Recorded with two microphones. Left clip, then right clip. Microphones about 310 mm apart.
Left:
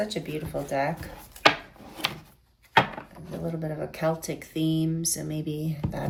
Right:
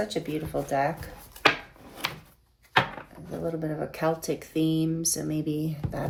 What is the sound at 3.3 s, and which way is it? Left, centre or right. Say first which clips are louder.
Speech: right 2 dB; centre.